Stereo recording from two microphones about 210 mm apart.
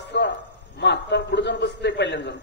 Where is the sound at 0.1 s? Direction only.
55° left (ahead or behind).